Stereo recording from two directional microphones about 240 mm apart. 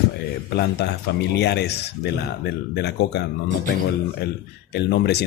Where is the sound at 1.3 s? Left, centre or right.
Left.